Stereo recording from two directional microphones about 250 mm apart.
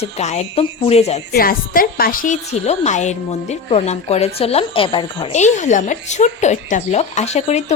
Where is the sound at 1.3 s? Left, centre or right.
Left.